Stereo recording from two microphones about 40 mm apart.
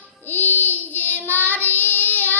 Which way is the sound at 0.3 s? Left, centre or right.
Left.